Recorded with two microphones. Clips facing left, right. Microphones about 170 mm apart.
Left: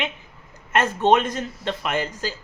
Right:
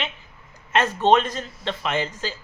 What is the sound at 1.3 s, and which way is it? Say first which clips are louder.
Speech: left 2 dB; 10° left (ahead or behind).